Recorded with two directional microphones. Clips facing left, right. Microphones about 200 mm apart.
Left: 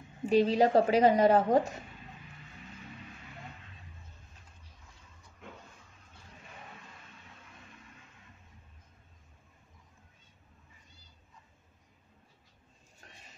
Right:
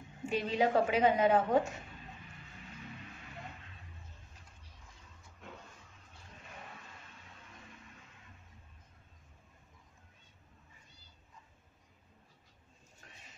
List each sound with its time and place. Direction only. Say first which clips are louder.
0.3 s a woman's voice: left 6 dB; 35° left (ahead or behind)